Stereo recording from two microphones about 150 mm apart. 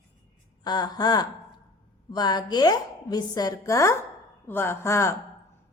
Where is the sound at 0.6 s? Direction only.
25° left (ahead or behind).